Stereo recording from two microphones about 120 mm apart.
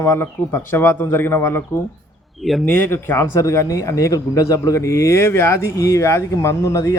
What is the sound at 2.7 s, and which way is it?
Speech, 20° left (ahead or behind).